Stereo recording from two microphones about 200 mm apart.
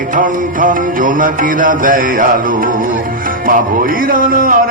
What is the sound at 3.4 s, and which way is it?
Music, 45° right (ahead or behind).